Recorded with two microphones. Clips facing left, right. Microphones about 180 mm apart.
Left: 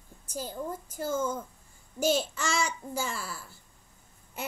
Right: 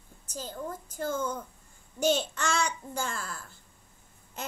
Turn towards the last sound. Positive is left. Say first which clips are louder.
# left 2 dB
turn(degrees=10)  # may be behind; listen again after turning